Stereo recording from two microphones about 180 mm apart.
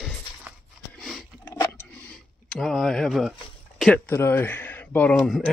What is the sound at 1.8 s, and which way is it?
Tick-tock, 5° left (ahead or behind).